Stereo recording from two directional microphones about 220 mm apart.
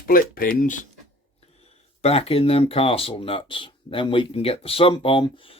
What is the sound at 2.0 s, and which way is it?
Speech, 25° left (ahead or behind).